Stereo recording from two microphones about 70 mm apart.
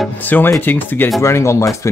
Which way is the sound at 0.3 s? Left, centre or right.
Left.